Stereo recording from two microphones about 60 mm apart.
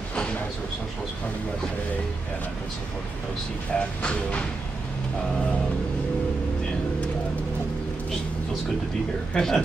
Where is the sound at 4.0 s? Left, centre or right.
Centre.